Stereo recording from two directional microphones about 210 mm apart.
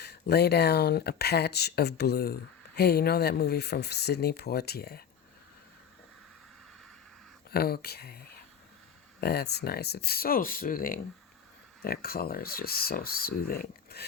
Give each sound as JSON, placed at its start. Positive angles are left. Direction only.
{"t": 0.0, "sound": "speech", "side_deg": 50}
{"t": 7.5, "sound": "speech", "side_deg": 45}